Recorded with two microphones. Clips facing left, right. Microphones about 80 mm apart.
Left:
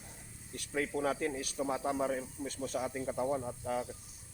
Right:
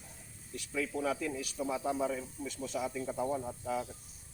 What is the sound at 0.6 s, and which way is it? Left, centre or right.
Speech, left.